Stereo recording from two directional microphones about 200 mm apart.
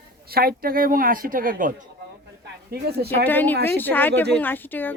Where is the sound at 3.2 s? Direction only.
10° left (ahead or behind).